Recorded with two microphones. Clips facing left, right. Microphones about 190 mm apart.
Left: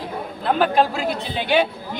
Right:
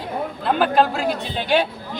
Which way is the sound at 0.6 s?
Centre (ahead or behind).